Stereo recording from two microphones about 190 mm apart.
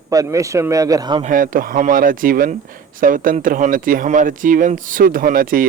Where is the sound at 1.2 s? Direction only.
45° right (ahead or behind).